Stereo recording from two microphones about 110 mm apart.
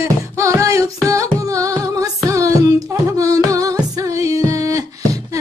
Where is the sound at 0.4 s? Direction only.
30° right (ahead or behind).